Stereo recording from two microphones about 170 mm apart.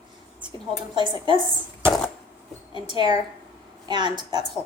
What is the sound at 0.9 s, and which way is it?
Speech, 25° right (ahead or behind).